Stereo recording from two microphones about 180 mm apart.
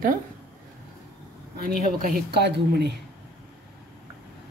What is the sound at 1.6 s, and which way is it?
Speech, 55° right (ahead or behind).